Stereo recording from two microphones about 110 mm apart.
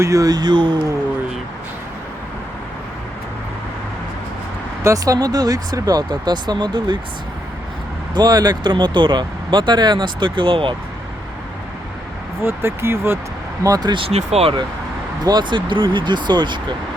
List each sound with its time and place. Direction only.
0.0 s speech: 30° right (ahead or behind)
4.8 s speech: 30° right (ahead or behind)
8.1 s speech: 35° right (ahead or behind)
12.4 s speech: 20° right (ahead or behind)
13.7 s speech: 40° right (ahead or behind)
14.1 s speech: 80° right
15.2 s speech: 40° right (ahead or behind)